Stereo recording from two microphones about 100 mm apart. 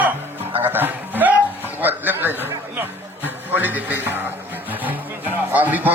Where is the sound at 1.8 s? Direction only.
20° right (ahead or behind).